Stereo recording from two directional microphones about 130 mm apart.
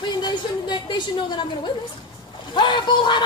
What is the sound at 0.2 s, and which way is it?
Speech, 35° left (ahead or behind).